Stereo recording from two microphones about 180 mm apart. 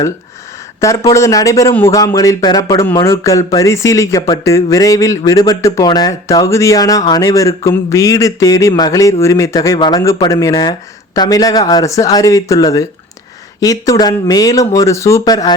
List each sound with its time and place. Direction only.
0.8 s speech: 15° left (ahead or behind)